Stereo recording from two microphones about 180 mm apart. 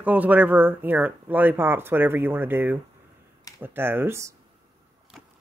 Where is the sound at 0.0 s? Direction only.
10° right (ahead or behind).